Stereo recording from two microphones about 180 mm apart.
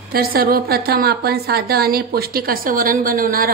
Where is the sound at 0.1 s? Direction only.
55° right (ahead or behind).